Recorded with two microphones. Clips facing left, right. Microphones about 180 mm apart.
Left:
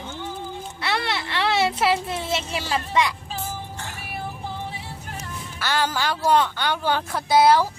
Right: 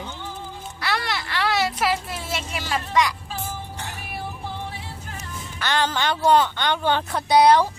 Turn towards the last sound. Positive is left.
turn(degrees=5)  # may be behind; listen again after turning